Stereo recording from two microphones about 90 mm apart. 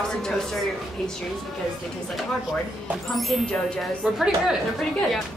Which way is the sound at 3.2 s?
Centre (ahead or behind).